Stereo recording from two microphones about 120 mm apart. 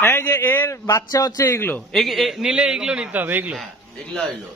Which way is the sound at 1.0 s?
30° left (ahead or behind).